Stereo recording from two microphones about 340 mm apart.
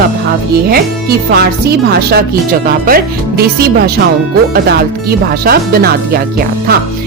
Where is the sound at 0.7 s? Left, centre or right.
Right.